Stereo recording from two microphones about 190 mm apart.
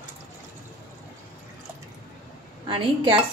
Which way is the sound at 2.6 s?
25° right (ahead or behind).